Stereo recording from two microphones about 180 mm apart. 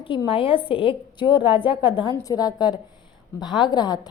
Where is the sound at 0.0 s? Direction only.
30° left (ahead or behind).